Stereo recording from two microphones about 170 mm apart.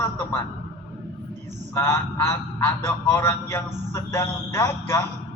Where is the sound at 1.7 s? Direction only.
15° left (ahead or behind).